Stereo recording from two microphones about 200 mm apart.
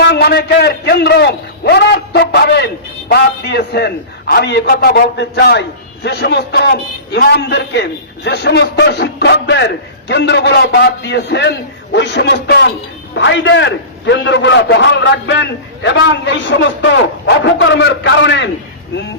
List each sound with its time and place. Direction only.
0.0 s a man's voice: 55° left (ahead or behind)